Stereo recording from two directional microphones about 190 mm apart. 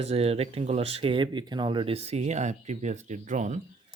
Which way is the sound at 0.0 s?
30° right (ahead or behind).